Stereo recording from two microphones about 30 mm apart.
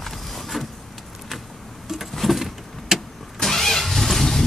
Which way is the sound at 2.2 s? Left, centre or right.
Centre.